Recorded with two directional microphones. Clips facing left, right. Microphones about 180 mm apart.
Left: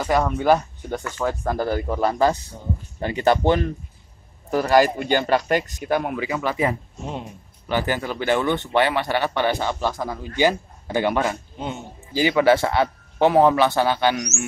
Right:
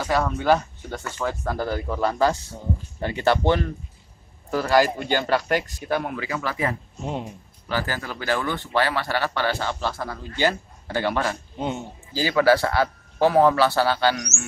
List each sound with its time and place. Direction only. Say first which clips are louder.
0.0 s speech: left 3 dB; 15° left (ahead or behind)